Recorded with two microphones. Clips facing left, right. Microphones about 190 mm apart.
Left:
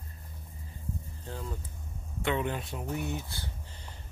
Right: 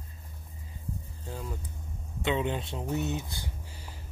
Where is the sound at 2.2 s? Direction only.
20° right (ahead or behind).